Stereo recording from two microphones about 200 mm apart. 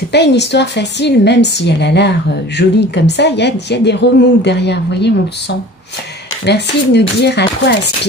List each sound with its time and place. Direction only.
0.1 s a woman's voice: 60° left (ahead or behind)
6.4 s a woman's voice: 55° left (ahead or behind)